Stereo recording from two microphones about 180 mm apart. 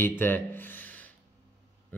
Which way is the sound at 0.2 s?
10° left (ahead or behind).